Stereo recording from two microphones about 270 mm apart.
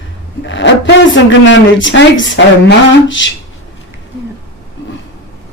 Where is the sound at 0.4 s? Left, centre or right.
Left.